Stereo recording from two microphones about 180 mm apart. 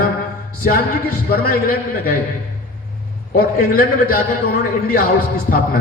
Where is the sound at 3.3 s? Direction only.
55° left (ahead or behind).